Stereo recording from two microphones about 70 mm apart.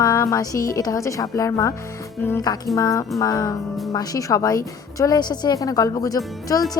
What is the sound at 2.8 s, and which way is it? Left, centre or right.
Speech, left.